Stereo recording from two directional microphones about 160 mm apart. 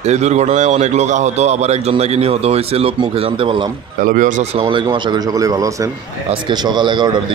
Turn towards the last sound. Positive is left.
turn(degrees=-30)  # may be behind; listen again after turning